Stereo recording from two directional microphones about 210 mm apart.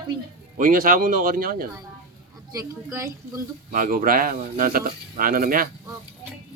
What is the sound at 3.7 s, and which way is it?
Speech, 40° right (ahead or behind).